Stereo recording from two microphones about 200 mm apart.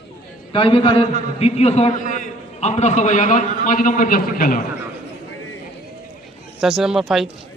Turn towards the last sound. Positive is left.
turn(degrees=0)  # may be behind; listen again after turning